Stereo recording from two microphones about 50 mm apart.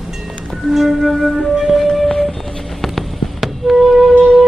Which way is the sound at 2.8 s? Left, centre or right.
Centre.